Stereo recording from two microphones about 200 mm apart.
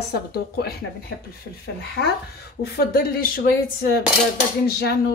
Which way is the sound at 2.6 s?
50° left (ahead or behind).